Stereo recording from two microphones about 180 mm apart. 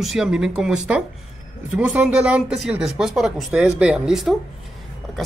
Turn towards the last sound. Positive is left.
turn(degrees=-5)  # may be behind; listen again after turning